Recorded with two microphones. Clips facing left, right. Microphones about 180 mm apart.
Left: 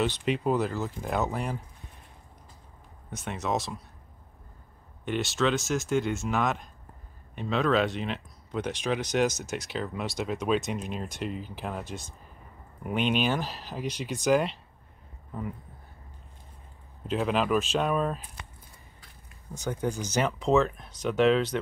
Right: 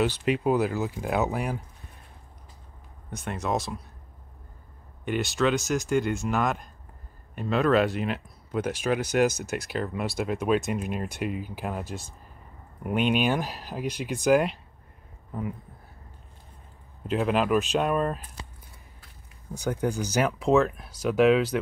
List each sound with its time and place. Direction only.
0.0 s speech: 5° right (ahead or behind)
3.1 s speech: 5° left (ahead or behind)
5.0 s speech: centre (ahead or behind)
17.1 s speech: 5° right (ahead or behind)
19.5 s speech: 10° right (ahead or behind)